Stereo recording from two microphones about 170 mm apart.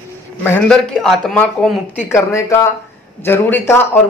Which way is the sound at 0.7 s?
Centre (ahead or behind).